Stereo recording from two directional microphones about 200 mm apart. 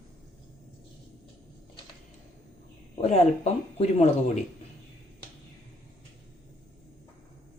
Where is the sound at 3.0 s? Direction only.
30° left (ahead or behind).